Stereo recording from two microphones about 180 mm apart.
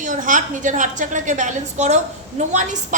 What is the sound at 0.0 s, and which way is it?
A woman's voice, 45° right (ahead or behind).